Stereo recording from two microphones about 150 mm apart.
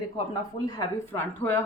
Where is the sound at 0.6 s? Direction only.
25° left (ahead or behind).